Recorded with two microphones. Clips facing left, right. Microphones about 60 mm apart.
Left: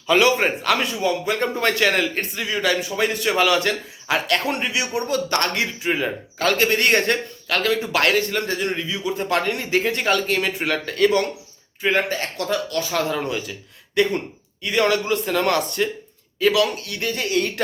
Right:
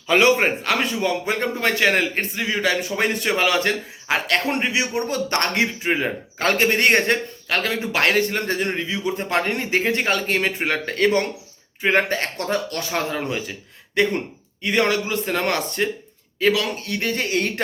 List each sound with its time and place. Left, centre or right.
0.1 s a man's voice: right
0.9 s a man's voice: right
1.7 s a man's voice: centre
2.9 s a man's voice: right
3.2 s a man's voice: right